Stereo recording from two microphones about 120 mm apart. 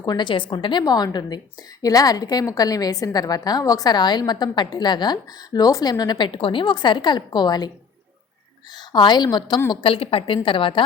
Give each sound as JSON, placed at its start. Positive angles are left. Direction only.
{"t": 0.0, "sound": "a woman's voice", "side_deg": 40}
{"t": 8.9, "sound": "a woman's voice", "side_deg": 40}
{"t": 9.8, "sound": "a woman's voice", "side_deg": 50}